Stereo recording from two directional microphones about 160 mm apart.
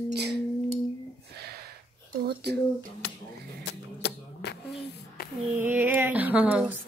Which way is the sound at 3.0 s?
90° left.